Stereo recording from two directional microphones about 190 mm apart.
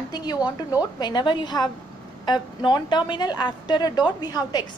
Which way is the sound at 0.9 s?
20° left (ahead or behind).